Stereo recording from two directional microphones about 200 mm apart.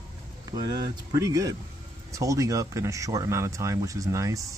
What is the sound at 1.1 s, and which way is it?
Speech, 15° right (ahead or behind).